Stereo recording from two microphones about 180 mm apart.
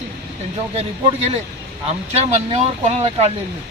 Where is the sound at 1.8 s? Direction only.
35° right (ahead or behind).